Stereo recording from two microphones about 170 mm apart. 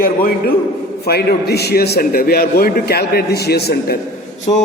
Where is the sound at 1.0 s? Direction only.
70° left (ahead or behind).